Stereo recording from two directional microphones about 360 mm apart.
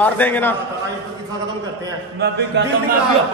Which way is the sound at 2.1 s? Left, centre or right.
Right.